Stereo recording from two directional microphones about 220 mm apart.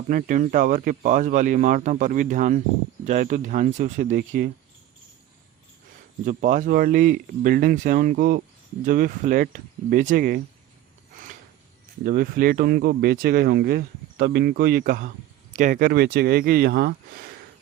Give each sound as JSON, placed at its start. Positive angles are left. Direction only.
{"t": 0.1, "sound": "speech", "side_deg": -40}
{"t": 6.2, "sound": "speech", "side_deg": -35}
{"t": 12.0, "sound": "speech", "side_deg": -40}